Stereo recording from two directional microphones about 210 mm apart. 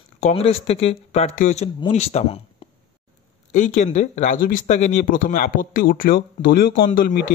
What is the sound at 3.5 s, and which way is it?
Speech, 35° left (ahead or behind).